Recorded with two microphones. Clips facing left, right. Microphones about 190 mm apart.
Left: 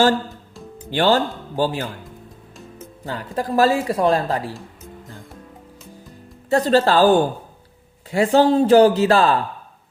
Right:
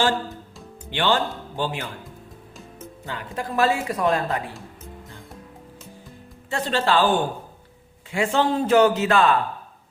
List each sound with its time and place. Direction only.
0.9 s speech: 40° left (ahead or behind)
3.1 s speech: 40° left (ahead or behind)
6.5 s speech: 40° left (ahead or behind)